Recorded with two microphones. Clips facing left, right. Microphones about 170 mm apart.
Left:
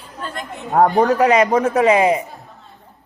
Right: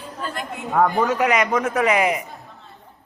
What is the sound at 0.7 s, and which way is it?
A man's voice, 35° left (ahead or behind).